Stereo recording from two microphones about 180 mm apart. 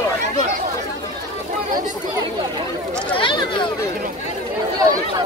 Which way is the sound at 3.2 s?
25° left (ahead or behind).